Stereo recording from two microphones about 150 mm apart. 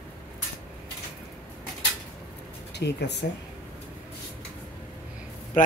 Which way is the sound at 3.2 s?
65° left (ahead or behind).